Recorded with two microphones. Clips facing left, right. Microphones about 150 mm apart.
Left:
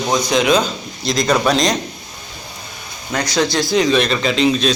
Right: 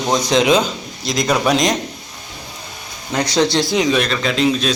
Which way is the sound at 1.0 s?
10° right (ahead or behind).